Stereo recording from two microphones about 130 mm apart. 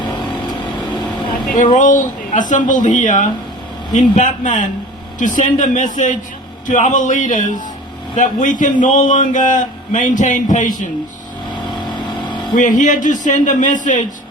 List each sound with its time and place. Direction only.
1.5 s a man's voice: 80° left
11.9 s vehicle: 35° left (ahead or behind)
12.5 s a man's voice: 80° left